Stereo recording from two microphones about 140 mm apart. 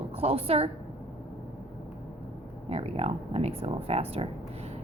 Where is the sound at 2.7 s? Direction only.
45° right (ahead or behind).